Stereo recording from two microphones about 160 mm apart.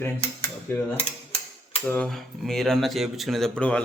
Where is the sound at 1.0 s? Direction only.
40° left (ahead or behind).